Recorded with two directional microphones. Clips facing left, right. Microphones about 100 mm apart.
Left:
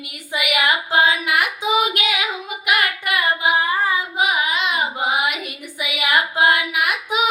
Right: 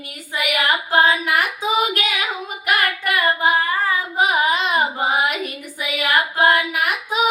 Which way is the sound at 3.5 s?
15° left (ahead or behind).